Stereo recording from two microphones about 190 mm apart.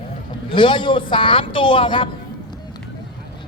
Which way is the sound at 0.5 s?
25° left (ahead or behind).